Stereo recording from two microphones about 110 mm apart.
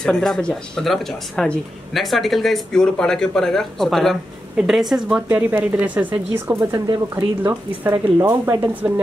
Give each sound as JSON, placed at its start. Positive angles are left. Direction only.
{"t": 0.0, "sound": "speech", "side_deg": 5}
{"t": 5.3, "sound": "speech", "side_deg": -15}